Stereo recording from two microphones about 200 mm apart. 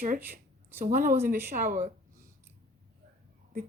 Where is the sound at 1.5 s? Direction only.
40° right (ahead or behind).